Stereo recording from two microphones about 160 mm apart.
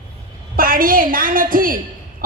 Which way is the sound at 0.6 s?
65° right (ahead or behind).